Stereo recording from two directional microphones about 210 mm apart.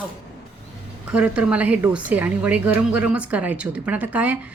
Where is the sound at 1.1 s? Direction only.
5° right (ahead or behind).